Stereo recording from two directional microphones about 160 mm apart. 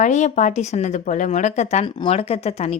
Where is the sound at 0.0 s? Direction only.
50° left (ahead or behind).